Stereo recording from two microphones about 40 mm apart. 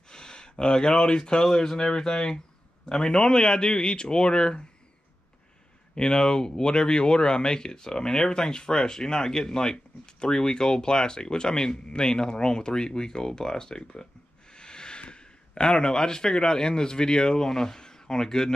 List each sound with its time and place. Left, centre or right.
0.1 s speech: centre
5.9 s speech: centre